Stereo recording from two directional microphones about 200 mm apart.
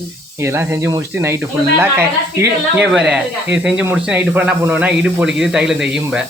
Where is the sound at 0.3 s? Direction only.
15° right (ahead or behind).